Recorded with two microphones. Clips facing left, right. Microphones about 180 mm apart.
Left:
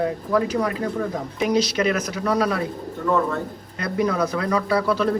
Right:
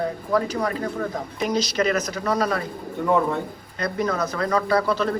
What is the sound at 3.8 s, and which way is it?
Speech, 5° left (ahead or behind).